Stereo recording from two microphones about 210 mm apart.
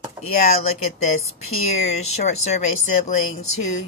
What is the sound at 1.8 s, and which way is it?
Speech, 35° left (ahead or behind).